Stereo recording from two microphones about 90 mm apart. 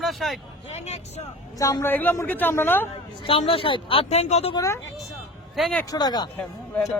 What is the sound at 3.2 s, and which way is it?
Speech, 90° left.